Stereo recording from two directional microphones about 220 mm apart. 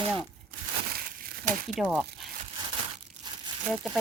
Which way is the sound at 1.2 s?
35° right (ahead or behind).